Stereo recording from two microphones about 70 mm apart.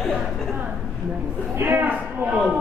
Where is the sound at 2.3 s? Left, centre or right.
Centre.